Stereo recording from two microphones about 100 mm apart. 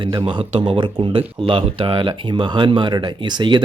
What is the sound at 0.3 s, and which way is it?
Speech, 55° right (ahead or behind).